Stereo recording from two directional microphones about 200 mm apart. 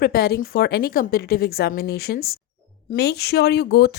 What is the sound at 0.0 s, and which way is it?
Speech, 50° left (ahead or behind).